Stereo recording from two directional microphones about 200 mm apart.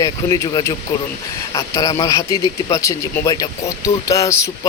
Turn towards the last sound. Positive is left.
turn(degrees=15)  # may be behind; listen again after turning